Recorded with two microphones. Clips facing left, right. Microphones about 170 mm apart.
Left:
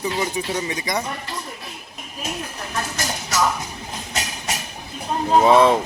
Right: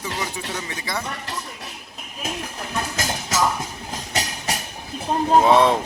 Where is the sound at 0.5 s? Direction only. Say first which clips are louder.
Left 5 dB; 15° left (ahead or behind).